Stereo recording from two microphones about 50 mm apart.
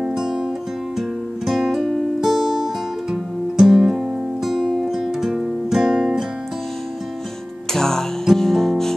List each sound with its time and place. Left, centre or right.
0.9 s music: centre
7.7 s music: centre